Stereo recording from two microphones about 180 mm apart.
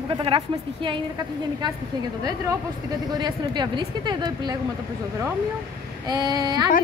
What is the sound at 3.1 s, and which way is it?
Speech, 25° right (ahead or behind).